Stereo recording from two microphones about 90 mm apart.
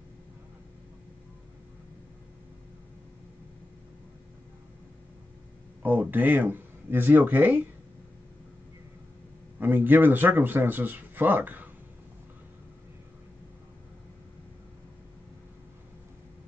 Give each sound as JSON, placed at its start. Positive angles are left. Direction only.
{"t": 5.8, "sound": "speech", "side_deg": -20}
{"t": 9.6, "sound": "speech", "side_deg": -20}